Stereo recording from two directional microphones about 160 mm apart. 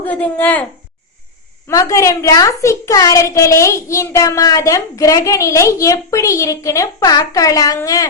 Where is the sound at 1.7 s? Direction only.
20° left (ahead or behind).